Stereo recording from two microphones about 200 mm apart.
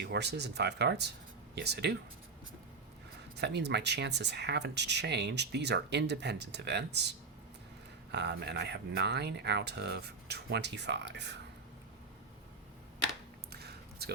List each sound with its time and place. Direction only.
0.0 s speech: 55° right (ahead or behind)
3.3 s speech: 60° right (ahead or behind)
8.1 s speech: 60° right (ahead or behind)
13.5 s a sound: 55° right (ahead or behind)